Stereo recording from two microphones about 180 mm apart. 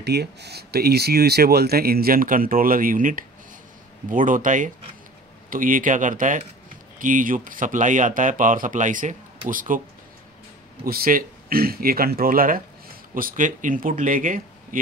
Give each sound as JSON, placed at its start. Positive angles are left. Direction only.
{"t": 0.0, "sound": "speech", "side_deg": -65}
{"t": 10.8, "sound": "speech", "side_deg": -55}